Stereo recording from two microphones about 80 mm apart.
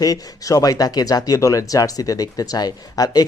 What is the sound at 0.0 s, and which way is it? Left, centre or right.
Speech, left.